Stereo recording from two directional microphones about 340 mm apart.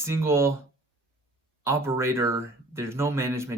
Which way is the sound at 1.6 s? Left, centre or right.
Centre.